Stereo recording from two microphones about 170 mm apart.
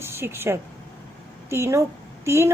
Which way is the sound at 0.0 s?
15° right (ahead or behind).